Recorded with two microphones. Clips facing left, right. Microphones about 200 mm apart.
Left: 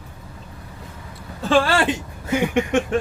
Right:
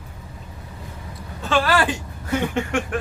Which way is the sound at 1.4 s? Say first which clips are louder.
Left 2 dB; 30° left (ahead or behind).